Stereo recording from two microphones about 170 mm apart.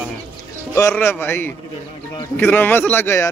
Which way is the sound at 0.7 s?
15° left (ahead or behind).